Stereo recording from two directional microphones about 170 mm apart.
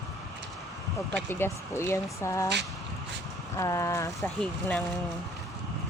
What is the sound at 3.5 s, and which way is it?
Speech, 15° left (ahead or behind).